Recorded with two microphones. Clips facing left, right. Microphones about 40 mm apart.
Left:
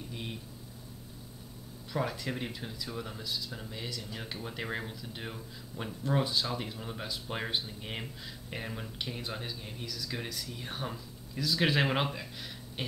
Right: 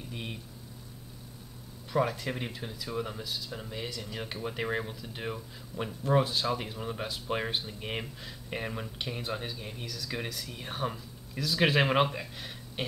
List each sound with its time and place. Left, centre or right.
0.1 s speech: right
1.9 s speech: centre